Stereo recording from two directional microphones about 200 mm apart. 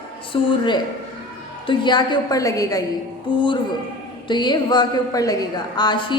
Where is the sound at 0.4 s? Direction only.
25° left (ahead or behind).